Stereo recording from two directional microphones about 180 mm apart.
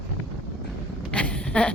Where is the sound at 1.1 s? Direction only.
5° left (ahead or behind).